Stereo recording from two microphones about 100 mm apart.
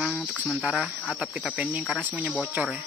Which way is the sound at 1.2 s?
10° right (ahead or behind).